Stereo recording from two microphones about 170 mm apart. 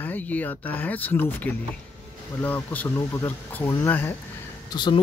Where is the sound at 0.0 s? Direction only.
10° left (ahead or behind).